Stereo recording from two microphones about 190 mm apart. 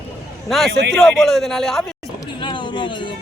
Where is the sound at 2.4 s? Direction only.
25° left (ahead or behind).